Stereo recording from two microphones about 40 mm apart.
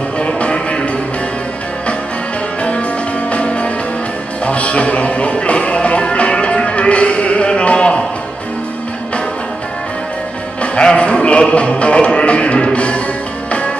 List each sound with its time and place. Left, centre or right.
0.2 s music: left
3.3 s music: left
10.6 s music: left